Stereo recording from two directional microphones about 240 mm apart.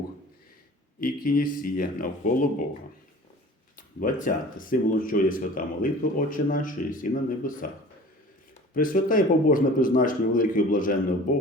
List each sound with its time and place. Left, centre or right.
1.0 s speech: left
3.8 s speech: left
8.7 s speech: left